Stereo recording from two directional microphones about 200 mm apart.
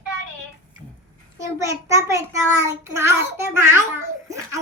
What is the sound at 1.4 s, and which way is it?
A child's voice, 15° right (ahead or behind).